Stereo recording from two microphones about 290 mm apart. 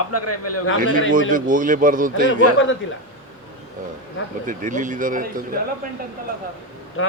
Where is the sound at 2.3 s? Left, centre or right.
Left.